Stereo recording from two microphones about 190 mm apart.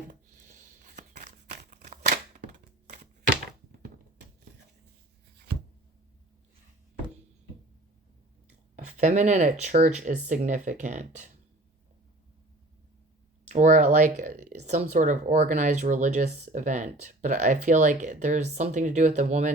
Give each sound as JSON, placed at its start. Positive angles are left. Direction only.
{"t": 0.1, "sound": "a sound", "side_deg": -45}
{"t": 2.0, "sound": "cap gun", "side_deg": -40}
{"t": 8.7, "sound": "speech", "side_deg": -40}
{"t": 13.5, "sound": "speech", "side_deg": -40}